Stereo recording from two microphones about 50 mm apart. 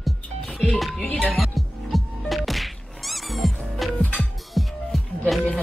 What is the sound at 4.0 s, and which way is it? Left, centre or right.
Music, left.